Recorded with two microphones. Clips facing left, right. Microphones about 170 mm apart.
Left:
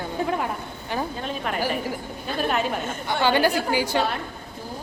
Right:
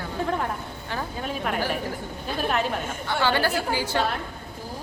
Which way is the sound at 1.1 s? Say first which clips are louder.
Even; 5° right (ahead or behind).